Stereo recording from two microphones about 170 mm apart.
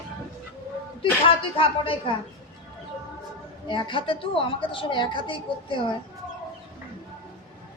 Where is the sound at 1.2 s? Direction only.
30° left (ahead or behind).